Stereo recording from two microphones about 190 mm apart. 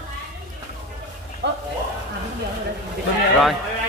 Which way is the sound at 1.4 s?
65° right (ahead or behind).